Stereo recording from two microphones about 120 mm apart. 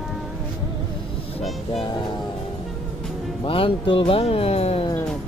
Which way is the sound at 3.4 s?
50° left (ahead or behind).